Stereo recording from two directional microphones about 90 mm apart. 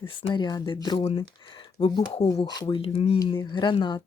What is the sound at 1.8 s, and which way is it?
Speech, 90° left.